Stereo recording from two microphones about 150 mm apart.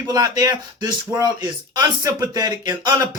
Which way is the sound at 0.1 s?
25° right (ahead or behind).